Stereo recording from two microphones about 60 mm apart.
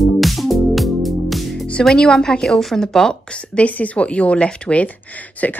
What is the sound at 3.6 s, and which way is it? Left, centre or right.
Speech, left.